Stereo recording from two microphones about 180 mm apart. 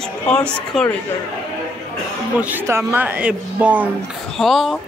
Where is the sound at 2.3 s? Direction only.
10° right (ahead or behind).